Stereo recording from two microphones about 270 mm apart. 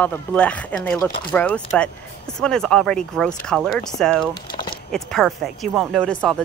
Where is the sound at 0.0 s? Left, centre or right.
Centre.